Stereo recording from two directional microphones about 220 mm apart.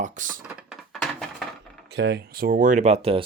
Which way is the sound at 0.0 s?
35° right (ahead or behind).